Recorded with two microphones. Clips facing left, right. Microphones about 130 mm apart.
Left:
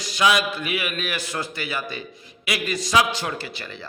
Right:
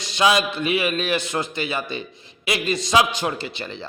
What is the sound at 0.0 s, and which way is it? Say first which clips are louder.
A man's voice: right 2 dB; 25° right (ahead or behind).